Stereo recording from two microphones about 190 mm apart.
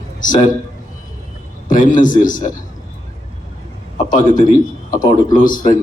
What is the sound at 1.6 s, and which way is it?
Speech, 45° left (ahead or behind).